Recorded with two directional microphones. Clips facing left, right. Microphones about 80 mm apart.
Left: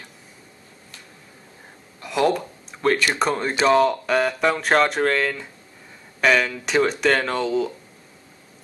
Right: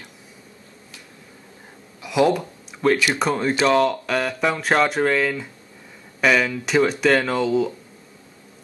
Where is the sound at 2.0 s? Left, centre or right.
Centre.